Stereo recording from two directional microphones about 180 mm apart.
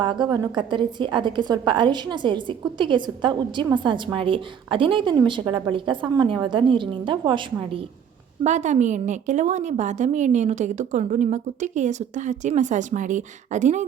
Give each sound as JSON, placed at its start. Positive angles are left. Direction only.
{"t": 0.0, "sound": "a woman's voice", "side_deg": -25}
{"t": 8.4, "sound": "a woman's voice", "side_deg": -40}